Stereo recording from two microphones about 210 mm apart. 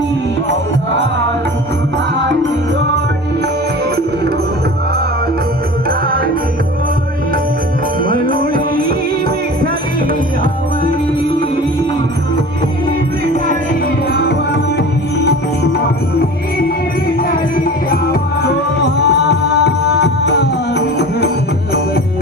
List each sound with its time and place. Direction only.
8.0 s music: 40° right (ahead or behind)
14.1 s music: 50° left (ahead or behind)
18.1 s music: 50° left (ahead or behind)